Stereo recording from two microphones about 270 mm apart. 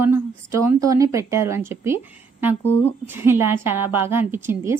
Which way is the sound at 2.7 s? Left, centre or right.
Left.